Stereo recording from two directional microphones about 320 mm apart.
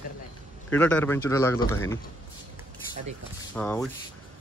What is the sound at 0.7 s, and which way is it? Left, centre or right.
Speech, centre.